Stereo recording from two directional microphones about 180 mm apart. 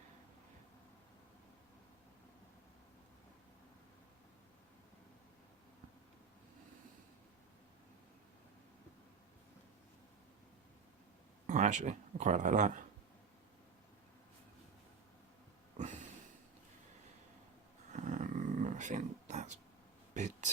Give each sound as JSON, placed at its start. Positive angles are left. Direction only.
{"t": 11.4, "sound": "speech", "side_deg": -40}
{"t": 15.8, "sound": "a sound", "side_deg": -40}
{"t": 17.9, "sound": "roaring cats", "side_deg": -45}
{"t": 20.1, "sound": "speech", "side_deg": -40}